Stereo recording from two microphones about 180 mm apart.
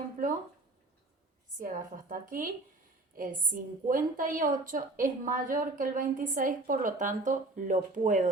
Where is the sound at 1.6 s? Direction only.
50° right (ahead or behind).